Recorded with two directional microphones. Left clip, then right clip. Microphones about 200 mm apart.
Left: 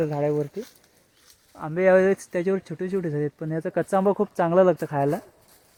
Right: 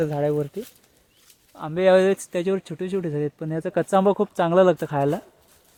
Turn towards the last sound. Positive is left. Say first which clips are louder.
# right 1 dB
turn(degrees=-15)  # may be behind; listen again after turning